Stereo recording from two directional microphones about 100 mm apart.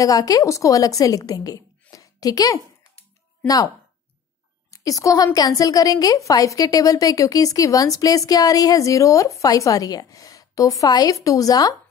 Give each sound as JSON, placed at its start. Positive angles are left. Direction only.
{"t": 0.0, "sound": "a woman's voice", "side_deg": 35}